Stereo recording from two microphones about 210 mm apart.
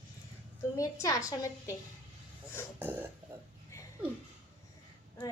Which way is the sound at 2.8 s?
10° right (ahead or behind).